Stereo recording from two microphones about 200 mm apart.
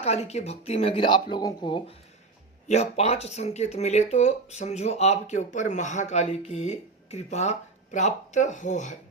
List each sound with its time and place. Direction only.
0.0 s speech: 30° left (ahead or behind)